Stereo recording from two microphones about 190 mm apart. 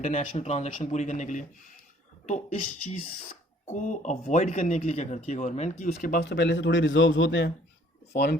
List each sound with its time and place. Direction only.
0.0 s speech: 35° left (ahead or behind)
3.7 s speech: 40° left (ahead or behind); by 7.5 s 70° left (ahead or behind)
8.1 s speech: 55° left (ahead or behind)